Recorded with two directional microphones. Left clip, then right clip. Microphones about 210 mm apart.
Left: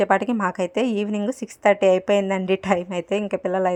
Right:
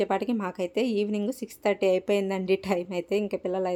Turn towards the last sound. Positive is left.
turn(degrees=15)  # may be behind; listen again after turning